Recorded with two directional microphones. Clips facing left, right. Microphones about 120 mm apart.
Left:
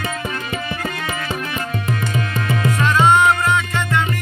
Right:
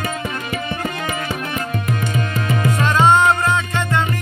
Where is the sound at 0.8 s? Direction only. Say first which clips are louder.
Right 1 dB; 20° right (ahead or behind).